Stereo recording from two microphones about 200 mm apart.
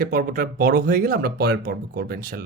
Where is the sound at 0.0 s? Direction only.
45° right (ahead or behind).